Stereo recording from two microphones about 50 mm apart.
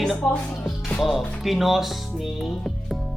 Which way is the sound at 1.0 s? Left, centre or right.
Centre.